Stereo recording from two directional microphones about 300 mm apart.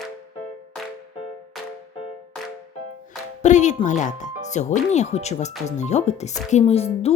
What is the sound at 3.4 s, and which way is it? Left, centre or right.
Speech, left.